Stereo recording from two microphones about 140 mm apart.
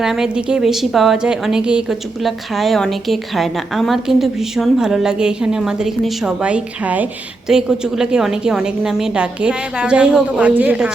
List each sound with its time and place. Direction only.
0.0 s a woman's voice: 5° right (ahead or behind)